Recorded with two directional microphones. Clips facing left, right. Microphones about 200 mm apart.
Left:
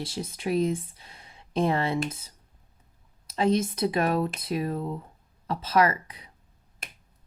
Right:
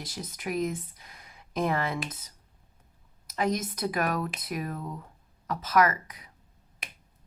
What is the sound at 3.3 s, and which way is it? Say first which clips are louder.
Speech: left 5 dB; 30° left (ahead or behind).